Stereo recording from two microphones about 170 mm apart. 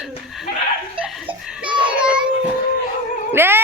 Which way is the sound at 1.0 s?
5° right (ahead or behind).